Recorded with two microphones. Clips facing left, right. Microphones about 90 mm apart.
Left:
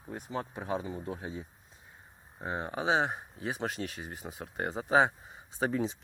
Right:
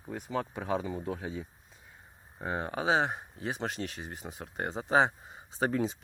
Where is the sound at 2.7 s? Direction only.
45° right (ahead or behind).